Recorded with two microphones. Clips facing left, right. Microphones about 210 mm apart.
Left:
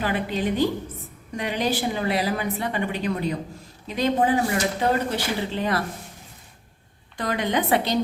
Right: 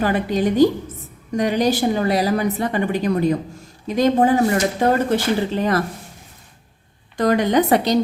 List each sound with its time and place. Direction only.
0.0 s a woman's voice: 45° right (ahead or behind)
7.2 s a woman's voice: 45° right (ahead or behind)